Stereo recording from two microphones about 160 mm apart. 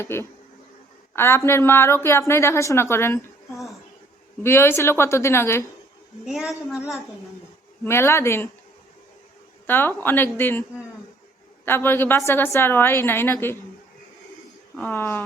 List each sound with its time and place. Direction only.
0.0 s a woman's voice: 15° left (ahead or behind)
3.5 s a sound: centre (ahead or behind)
4.4 s a woman's voice: 15° left (ahead or behind)
6.2 s a woman's voice: 5° right (ahead or behind)
7.9 s a woman's voice: 15° left (ahead or behind)
9.6 s a woman's voice: 15° left (ahead or behind)
11.6 s a woman's voice: 15° left (ahead or behind)
14.8 s a woman's voice: 15° left (ahead or behind)